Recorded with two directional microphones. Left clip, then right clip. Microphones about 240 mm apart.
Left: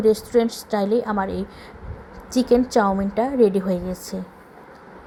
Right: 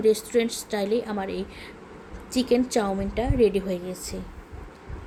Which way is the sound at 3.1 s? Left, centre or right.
Left.